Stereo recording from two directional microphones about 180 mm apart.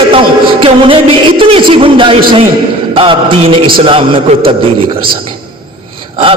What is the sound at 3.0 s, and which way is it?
A man's voice, 30° right (ahead or behind).